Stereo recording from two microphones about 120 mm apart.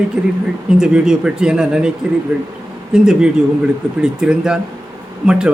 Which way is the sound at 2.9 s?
5° right (ahead or behind).